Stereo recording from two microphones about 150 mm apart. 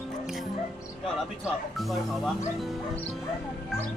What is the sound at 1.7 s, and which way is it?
Speech, centre (ahead or behind).